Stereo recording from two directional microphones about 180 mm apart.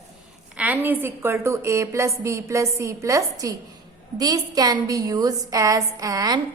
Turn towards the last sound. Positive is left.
turn(degrees=-20)  # may be behind; listen again after turning